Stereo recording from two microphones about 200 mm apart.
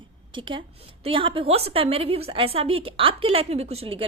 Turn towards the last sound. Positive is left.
turn(degrees=-30)  # may be behind; listen again after turning